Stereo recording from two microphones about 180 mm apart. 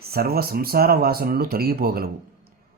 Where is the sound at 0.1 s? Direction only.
60° right (ahead or behind).